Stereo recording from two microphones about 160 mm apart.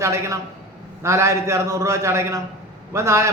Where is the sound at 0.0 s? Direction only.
15° right (ahead or behind).